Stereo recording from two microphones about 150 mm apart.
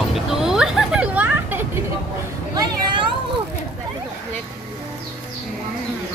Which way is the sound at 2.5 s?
30° right (ahead or behind).